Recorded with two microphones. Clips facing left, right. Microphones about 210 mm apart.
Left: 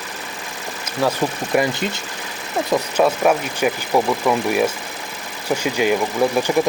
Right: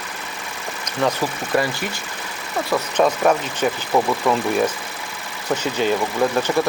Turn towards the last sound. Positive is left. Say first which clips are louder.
# left 2 dB
turn(degrees=10)  # may be behind; listen again after turning